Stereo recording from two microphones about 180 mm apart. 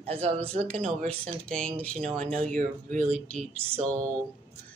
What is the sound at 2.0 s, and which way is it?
Speech, 35° right (ahead or behind).